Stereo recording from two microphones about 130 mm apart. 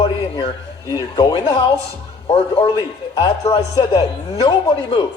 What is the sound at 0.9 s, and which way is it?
Speech, 35° left (ahead or behind).